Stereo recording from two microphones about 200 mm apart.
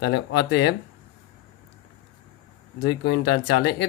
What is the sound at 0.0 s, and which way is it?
Speech, 55° left (ahead or behind).